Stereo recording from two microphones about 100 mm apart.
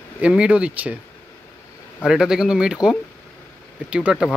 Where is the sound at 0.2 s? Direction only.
10° right (ahead or behind).